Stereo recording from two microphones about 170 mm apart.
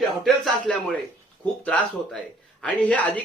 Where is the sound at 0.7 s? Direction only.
5° left (ahead or behind).